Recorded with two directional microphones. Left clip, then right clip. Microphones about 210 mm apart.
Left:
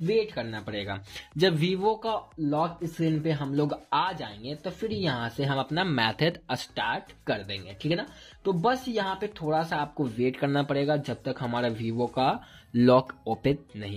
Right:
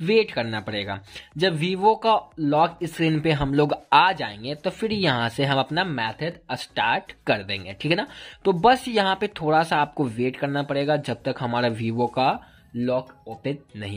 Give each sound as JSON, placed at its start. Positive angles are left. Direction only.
{"t": 0.0, "sound": "speech", "side_deg": -35}
{"t": 5.6, "sound": "speech", "side_deg": -15}
{"t": 5.9, "sound": "speech", "side_deg": 5}
{"t": 6.4, "sound": "speech", "side_deg": -10}
{"t": 10.0, "sound": "speech", "side_deg": -15}
{"t": 11.0, "sound": "speech", "side_deg": -20}
{"t": 12.7, "sound": "speech", "side_deg": 25}